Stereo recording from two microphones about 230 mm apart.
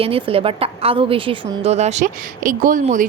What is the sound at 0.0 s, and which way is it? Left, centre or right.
A woman's voice, right.